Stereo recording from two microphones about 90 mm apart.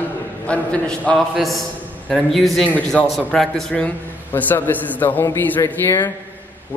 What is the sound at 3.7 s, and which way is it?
A man's voice, 15° left (ahead or behind).